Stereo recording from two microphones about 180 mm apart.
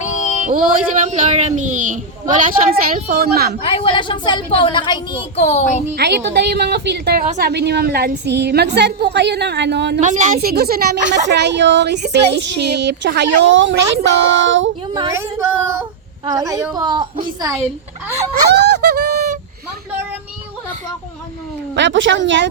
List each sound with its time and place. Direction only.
0.4 s a woman's voice: 45° right (ahead or behind)
3.6 s a woman's voice: 30° left (ahead or behind)
5.4 s speech: 40° left (ahead or behind)
6.0 s a woman's voice: 70° right (ahead or behind)
10.0 s speech: 45° right (ahead or behind)
10.5 s a woman's voice: 60° right (ahead or behind)
13.5 s speech: 90° right
15.1 s a woman's voice: 15° right (ahead or behind)
18.4 s a sound: 65° right (ahead or behind)
21.8 s speech: 85° right